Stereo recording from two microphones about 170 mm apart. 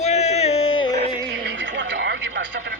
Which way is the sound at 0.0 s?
40° left (ahead or behind).